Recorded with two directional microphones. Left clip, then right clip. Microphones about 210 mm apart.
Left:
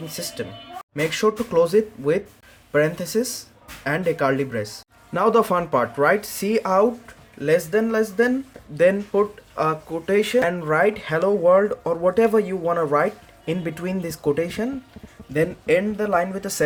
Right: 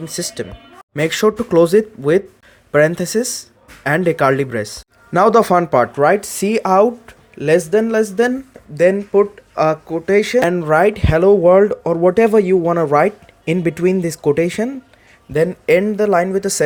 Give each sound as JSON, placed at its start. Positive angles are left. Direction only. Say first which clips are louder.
{"t": 0.1, "sound": "speech", "louder": "right 6 dB", "side_deg": -35}
{"t": 8.7, "sound": "speech", "louder": "right 5 dB", "side_deg": -15}
{"t": 9.6, "sound": "speech", "louder": "right 7 dB", "side_deg": -30}